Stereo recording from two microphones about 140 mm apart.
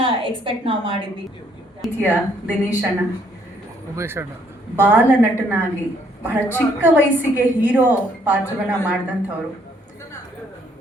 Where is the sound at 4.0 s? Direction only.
15° right (ahead or behind).